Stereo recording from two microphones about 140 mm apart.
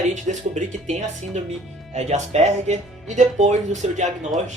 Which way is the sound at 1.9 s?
50° right (ahead or behind).